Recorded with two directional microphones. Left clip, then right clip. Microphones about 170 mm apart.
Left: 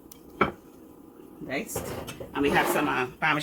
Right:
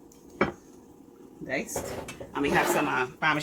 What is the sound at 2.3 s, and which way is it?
Speech, 20° left (ahead or behind).